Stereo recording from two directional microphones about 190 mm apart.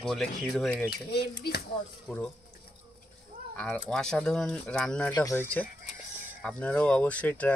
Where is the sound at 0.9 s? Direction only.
55° left (ahead or behind).